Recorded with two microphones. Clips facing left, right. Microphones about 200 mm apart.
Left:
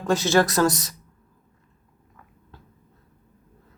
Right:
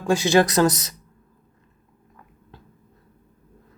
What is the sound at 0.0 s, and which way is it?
Speech, 10° right (ahead or behind).